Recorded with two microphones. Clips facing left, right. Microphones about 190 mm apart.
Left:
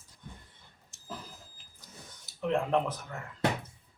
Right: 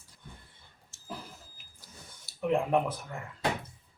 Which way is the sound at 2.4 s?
10° right (ahead or behind).